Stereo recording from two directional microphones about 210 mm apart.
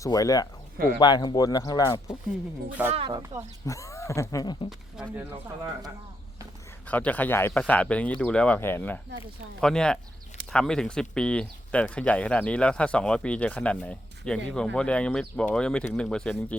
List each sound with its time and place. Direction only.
0.0 s speech: 15° left (ahead or behind)
2.9 s speech: 25° right (ahead or behind)
3.7 s speech: 15° left (ahead or behind)
6.8 s speech: 5° left (ahead or behind)